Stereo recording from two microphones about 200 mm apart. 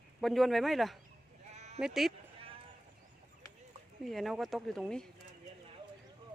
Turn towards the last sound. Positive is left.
turn(degrees=5)  # may be behind; listen again after turning